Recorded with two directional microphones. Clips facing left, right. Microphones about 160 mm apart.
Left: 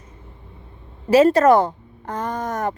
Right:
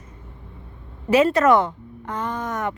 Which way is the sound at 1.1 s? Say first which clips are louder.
Left 3 dB; 35° left (ahead or behind).